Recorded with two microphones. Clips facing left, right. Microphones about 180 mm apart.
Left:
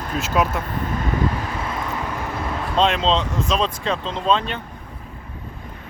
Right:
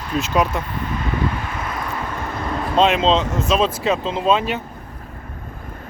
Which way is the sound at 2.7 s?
5° right (ahead or behind).